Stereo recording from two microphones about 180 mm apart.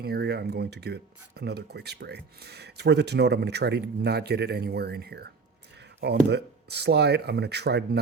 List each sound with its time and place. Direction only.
0.0 s speech: 65° right (ahead or behind)